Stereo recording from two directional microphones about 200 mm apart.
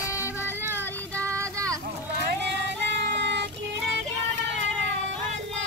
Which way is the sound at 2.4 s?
60° right (ahead or behind).